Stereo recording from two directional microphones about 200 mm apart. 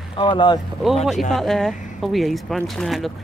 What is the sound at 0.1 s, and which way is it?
Speech, 25° left (ahead or behind).